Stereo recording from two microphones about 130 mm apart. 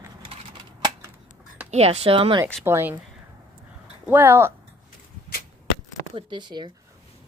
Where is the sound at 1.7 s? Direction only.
50° right (ahead or behind).